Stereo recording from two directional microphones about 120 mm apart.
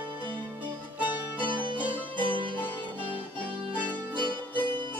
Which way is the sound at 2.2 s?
45° right (ahead or behind).